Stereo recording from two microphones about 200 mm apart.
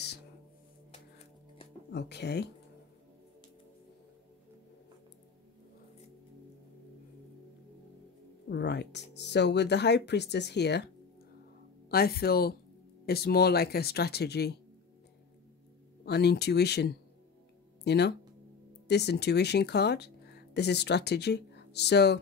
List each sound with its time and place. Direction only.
1.9 s speech: 55° left (ahead or behind)
8.5 s speech: 55° left (ahead or behind)
11.9 s speech: 50° left (ahead or behind)
16.1 s speech: 55° left (ahead or behind)